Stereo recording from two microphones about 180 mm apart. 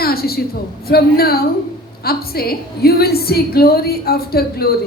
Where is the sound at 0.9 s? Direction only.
60° left (ahead or behind).